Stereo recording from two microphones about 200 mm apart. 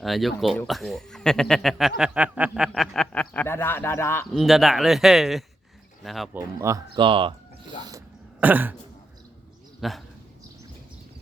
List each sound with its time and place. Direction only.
0.0 s speech: centre (ahead or behind)
4.4 s speech: centre (ahead or behind)
6.3 s speech: 15° right (ahead or behind)
8.4 s speech: 10° right (ahead or behind)
9.8 s speech: centre (ahead or behind)